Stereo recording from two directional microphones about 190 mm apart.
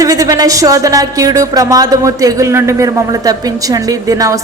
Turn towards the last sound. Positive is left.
turn(degrees=-20)  # may be behind; listen again after turning